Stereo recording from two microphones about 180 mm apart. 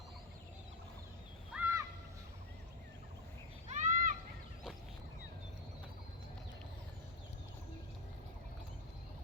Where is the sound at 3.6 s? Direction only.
45° right (ahead or behind).